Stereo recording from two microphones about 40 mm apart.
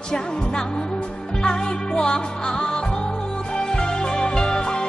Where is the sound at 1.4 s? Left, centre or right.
Centre.